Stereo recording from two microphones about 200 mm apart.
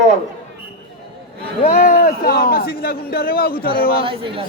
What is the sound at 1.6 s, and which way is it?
A man's voice, 45° left (ahead or behind).